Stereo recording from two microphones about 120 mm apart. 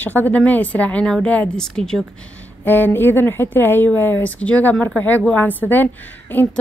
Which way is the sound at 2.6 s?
15° left (ahead or behind).